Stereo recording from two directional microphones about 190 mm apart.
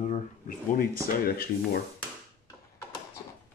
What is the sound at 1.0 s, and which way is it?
Speech, 50° left (ahead or behind).